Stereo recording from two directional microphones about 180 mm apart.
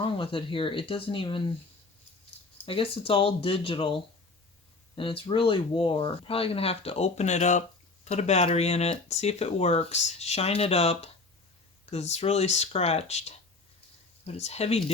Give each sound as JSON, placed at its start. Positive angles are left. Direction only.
{"t": 0.0, "sound": "speech", "side_deg": 30}
{"t": 2.6, "sound": "speech", "side_deg": 30}